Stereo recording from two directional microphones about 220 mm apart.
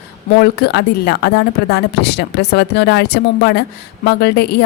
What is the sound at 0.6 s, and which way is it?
Speech, 50° left (ahead or behind).